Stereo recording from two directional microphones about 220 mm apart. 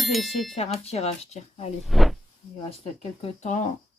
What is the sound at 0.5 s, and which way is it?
Speech, 30° left (ahead or behind).